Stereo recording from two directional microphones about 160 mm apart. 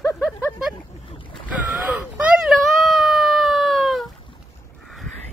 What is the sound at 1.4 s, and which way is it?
Wail, 10° right (ahead or behind).